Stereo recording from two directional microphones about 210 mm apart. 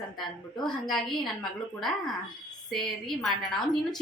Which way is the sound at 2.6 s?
Centre (ahead or behind).